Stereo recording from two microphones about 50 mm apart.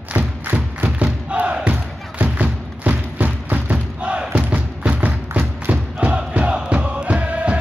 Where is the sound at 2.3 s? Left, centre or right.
Right.